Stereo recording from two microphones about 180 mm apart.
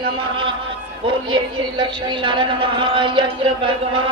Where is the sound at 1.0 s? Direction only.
25° right (ahead or behind).